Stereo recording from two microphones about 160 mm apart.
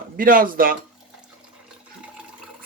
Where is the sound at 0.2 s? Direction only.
60° right (ahead or behind).